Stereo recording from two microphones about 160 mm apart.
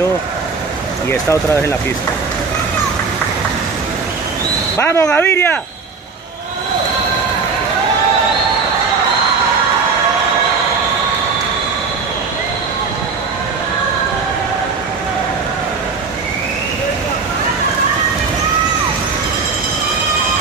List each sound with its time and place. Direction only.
1.3 s speech: 15° left (ahead or behind)
4.7 s speech: 15° left (ahead or behind)